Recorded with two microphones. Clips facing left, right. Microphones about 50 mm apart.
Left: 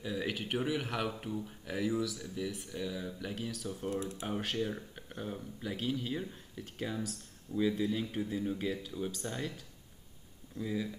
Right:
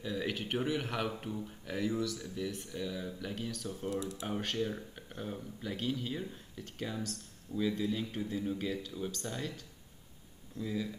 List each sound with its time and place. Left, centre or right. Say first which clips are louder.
0.0 s speech: even; centre
3.9 s speech: even; left
4.3 s speech: even; centre
10.6 s speech: left 1 dB; centre